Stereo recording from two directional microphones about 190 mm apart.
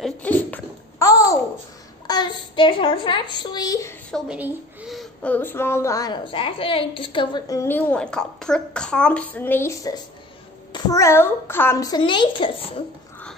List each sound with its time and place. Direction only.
0.0 s a sound: 10° left (ahead or behind)
2.0 s a child's voice: 25° left (ahead or behind)
4.1 s a woman's voice: 5° right (ahead or behind); by 12.8 s 25° left (ahead or behind)